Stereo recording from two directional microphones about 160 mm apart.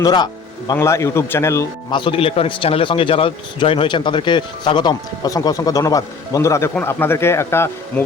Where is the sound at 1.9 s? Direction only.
30° left (ahead or behind).